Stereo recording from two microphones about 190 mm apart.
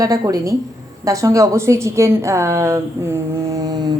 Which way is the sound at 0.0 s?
20° right (ahead or behind).